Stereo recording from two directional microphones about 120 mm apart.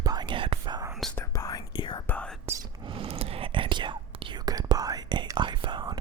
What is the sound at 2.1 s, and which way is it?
Whispering, 10° left (ahead or behind).